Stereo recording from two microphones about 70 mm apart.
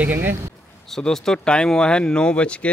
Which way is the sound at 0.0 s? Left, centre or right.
Right.